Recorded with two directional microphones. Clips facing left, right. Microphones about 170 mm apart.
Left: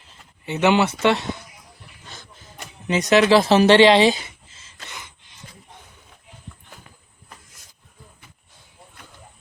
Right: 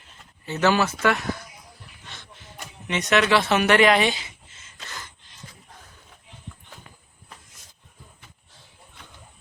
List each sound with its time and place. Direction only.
0.4 s speech: 20° left (ahead or behind)
2.8 s speech: 35° left (ahead or behind)
4.9 s a sound: 15° left (ahead or behind)